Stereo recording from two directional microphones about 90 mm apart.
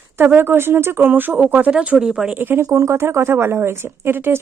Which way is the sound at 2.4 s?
20° right (ahead or behind).